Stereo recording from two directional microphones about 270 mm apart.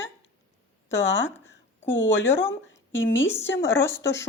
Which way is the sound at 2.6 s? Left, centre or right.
Left.